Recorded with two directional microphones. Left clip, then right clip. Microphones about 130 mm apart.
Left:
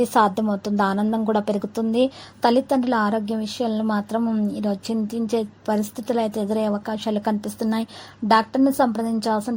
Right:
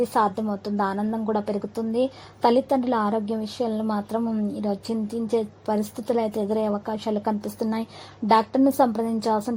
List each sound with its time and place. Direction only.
0.1 s a woman's voice: 15° left (ahead or behind)
2.4 s a woman's voice: centre (ahead or behind)
8.3 s a woman's voice: 10° right (ahead or behind)